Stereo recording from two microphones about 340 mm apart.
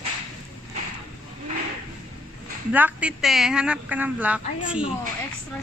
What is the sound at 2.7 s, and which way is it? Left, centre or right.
A woman's voice, centre.